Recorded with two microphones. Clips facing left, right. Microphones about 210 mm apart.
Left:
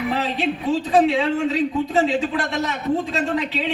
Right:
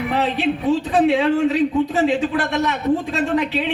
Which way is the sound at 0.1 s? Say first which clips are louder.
Right 3 dB; 65° right (ahead or behind).